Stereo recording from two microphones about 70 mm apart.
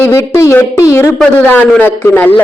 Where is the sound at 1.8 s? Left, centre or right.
Left.